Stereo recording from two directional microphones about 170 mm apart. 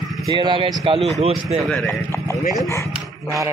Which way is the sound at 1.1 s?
40° right (ahead or behind).